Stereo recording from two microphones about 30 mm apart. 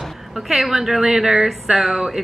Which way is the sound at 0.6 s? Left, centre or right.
Centre.